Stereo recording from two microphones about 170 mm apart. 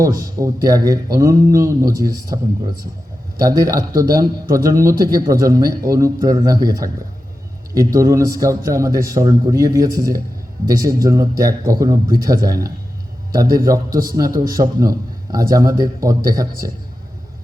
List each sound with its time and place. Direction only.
0.0 s a man's voice: 20° right (ahead or behind)
3.4 s a man's voice: 20° right (ahead or behind)